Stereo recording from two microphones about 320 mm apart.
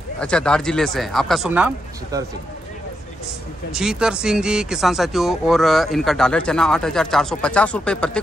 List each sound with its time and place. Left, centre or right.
0.2 s speech: centre
3.7 s speech: centre